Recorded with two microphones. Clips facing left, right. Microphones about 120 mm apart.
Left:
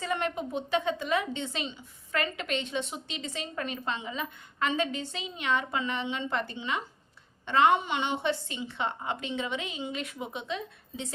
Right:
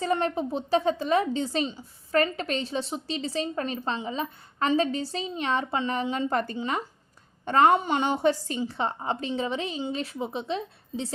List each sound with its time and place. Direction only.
0.0 s a woman's voice: 35° right (ahead or behind)